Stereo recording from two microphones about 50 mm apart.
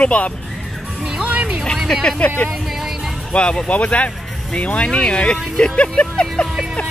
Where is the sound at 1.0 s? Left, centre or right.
Centre.